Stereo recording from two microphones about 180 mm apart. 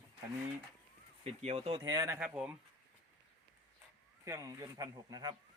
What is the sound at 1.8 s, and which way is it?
Speech, 20° right (ahead or behind).